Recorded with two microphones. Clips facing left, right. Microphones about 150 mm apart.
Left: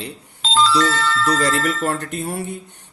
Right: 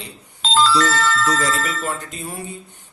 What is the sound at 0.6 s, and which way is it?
Speech, 50° right (ahead or behind).